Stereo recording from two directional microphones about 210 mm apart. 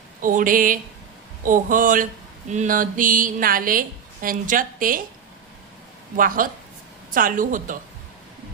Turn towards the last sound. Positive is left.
turn(degrees=-40)  # may be behind; listen again after turning